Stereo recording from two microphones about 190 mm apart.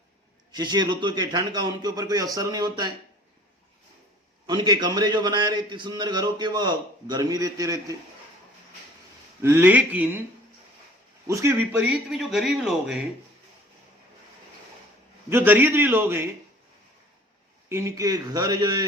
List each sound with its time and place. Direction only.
0.5 s a man's voice: 20° right (ahead or behind)
4.4 s a man's voice: 20° right (ahead or behind)
9.4 s a man's voice: 10° right (ahead or behind)
11.3 s a man's voice: 15° right (ahead or behind)
15.3 s a man's voice: 10° right (ahead or behind)
17.7 s a man's voice: 15° right (ahead or behind)